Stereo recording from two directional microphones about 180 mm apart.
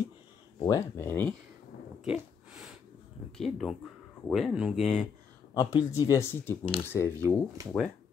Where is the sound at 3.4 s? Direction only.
Centre (ahead or behind).